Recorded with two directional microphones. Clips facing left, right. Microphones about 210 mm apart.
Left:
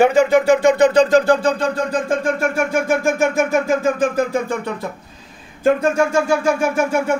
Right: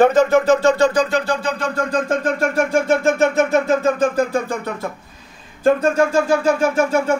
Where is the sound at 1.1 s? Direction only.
45° left (ahead or behind).